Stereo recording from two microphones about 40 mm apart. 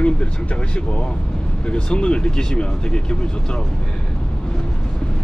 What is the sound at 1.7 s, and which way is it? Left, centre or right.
Speech, left.